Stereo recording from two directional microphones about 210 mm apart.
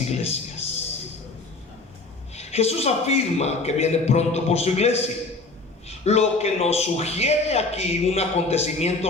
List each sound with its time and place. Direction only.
0.1 s speech: 30° left (ahead or behind)
2.3 s a man's voice: 30° left (ahead or behind)
6.1 s a man's voice: 30° left (ahead or behind)